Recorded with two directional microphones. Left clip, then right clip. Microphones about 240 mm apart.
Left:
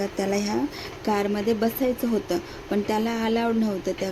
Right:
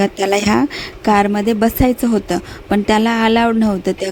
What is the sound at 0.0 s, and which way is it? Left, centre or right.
A woman's voice, right.